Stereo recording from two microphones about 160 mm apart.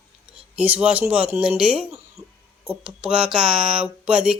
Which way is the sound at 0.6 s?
10° right (ahead or behind).